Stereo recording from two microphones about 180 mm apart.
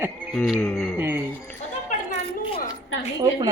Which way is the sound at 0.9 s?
10° right (ahead or behind).